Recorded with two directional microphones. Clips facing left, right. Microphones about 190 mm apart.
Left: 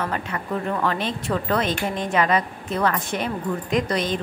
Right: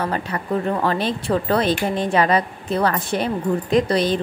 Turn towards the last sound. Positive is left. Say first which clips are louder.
# right 5 dB
turn(degrees=-35)  # may be behind; listen again after turning